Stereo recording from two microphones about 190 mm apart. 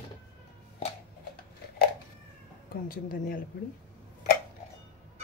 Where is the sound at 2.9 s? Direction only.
50° left (ahead or behind).